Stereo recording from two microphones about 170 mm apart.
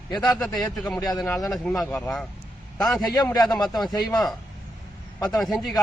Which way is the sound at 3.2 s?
20° left (ahead or behind).